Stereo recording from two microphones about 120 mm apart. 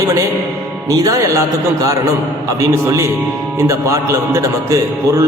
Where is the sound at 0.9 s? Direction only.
30° right (ahead or behind).